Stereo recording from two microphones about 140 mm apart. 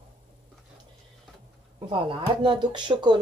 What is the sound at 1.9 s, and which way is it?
Speech, 35° right (ahead or behind).